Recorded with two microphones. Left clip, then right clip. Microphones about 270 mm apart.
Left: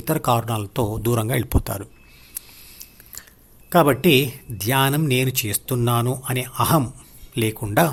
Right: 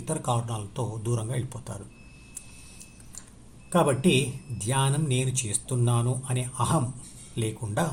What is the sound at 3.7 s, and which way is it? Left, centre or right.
A man's voice, left.